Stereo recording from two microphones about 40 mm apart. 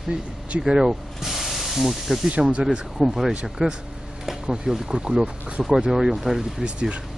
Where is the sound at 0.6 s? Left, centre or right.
Centre.